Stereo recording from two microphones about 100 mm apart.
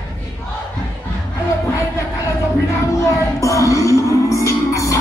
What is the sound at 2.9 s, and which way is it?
Child singing, 30° left (ahead or behind).